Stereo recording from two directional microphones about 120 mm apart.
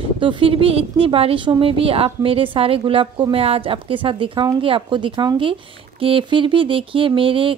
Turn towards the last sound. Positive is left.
turn(degrees=-45)  # may be behind; listen again after turning